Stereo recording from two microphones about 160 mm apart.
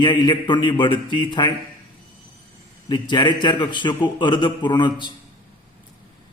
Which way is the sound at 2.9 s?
30° left (ahead or behind).